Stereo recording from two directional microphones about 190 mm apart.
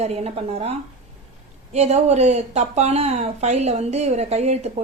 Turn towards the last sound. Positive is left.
turn(degrees=-35)  # may be behind; listen again after turning